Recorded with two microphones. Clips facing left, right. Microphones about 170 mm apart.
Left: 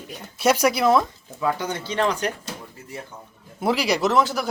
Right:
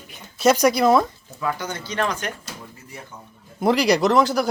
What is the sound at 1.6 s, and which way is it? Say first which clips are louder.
Speech: left 2 dB; 25° left (ahead or behind).